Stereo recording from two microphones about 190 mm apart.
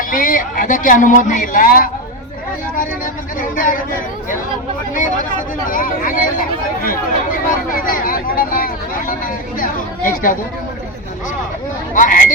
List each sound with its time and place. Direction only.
0.1 s speech: 45° left (ahead or behind)
3.5 s speech: 45° left (ahead or behind)
5.6 s speech: 45° left (ahead or behind)
11.9 s speech: 45° left (ahead or behind)